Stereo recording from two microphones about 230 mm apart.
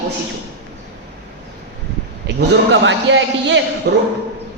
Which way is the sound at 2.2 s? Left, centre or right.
Right.